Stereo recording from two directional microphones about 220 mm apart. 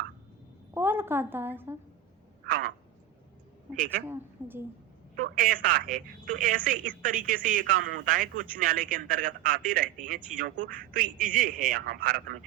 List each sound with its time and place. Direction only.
0.7 s a woman's voice: 10° right (ahead or behind)
2.4 s frog: 40° right (ahead or behind)
4.1 s a woman's voice: 10° right (ahead or behind)
5.1 s speech: 40° right (ahead or behind)